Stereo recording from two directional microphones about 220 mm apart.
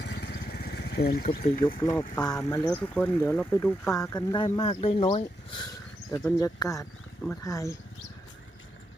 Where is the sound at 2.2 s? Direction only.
20° left (ahead or behind).